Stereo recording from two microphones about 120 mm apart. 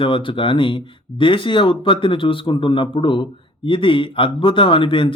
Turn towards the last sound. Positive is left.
turn(degrees=45)  # may be behind; listen again after turning